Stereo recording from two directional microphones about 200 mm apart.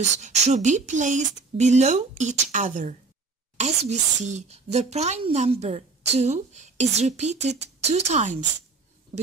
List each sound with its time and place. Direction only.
0.0 s speech: 35° right (ahead or behind)